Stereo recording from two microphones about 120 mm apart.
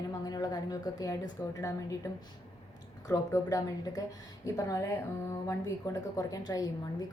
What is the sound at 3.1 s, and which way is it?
A woman's voice, 30° left (ahead or behind).